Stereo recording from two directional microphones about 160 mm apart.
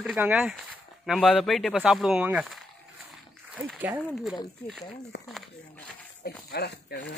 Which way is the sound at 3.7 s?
10° right (ahead or behind).